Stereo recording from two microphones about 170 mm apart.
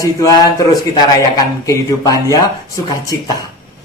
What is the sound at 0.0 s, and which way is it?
Speech, 20° left (ahead or behind).